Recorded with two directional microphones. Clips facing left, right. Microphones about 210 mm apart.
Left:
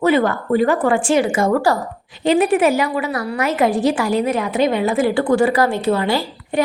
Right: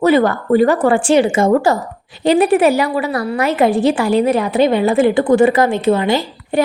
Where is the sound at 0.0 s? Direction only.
40° right (ahead or behind).